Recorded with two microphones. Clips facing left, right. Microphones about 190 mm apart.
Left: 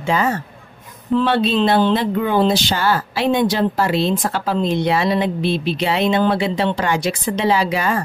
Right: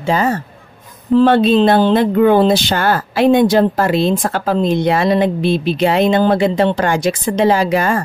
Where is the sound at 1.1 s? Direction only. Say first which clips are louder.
Right 6 dB; 45° right (ahead or behind).